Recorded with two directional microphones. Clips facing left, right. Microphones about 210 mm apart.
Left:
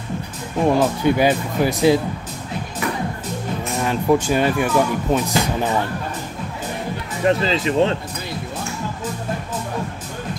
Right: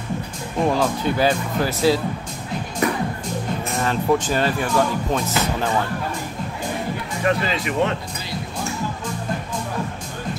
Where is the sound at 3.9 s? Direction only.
10° left (ahead or behind).